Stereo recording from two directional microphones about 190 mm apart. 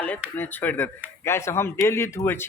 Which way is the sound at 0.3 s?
10° left (ahead or behind).